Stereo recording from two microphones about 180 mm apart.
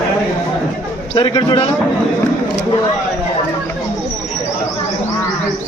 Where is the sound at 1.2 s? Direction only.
25° left (ahead or behind).